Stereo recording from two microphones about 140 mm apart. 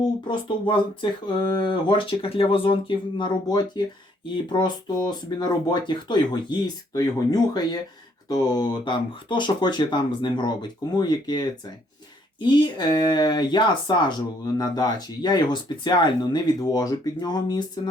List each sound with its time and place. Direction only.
0.3 s speech: 35° left (ahead or behind)